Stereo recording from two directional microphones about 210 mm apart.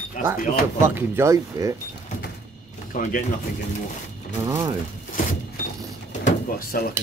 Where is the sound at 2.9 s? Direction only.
40° left (ahead or behind).